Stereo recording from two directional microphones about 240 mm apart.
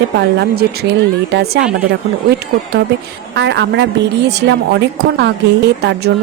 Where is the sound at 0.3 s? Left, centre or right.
Right.